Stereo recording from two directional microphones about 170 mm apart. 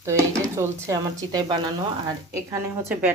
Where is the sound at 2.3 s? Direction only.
10° right (ahead or behind).